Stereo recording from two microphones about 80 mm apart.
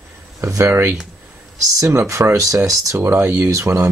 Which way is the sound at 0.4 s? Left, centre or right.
Right.